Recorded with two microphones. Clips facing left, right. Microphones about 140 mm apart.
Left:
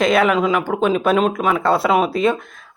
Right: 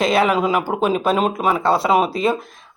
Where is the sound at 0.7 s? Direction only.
30° right (ahead or behind).